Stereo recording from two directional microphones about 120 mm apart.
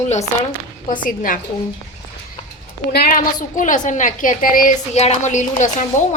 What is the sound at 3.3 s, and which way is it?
A woman's voice, 90° left.